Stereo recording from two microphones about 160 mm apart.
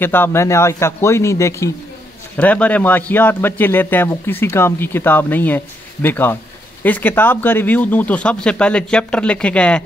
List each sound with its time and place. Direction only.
0.0 s a man's voice: 15° left (ahead or behind)